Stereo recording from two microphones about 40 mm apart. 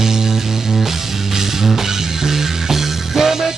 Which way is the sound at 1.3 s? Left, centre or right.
Centre.